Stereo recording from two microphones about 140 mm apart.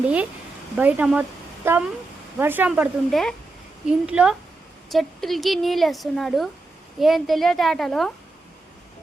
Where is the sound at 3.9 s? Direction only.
10° right (ahead or behind).